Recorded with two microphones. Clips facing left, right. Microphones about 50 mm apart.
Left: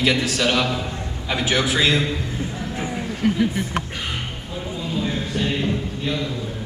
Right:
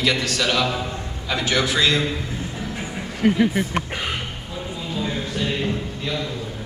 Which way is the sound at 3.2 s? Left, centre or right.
Right.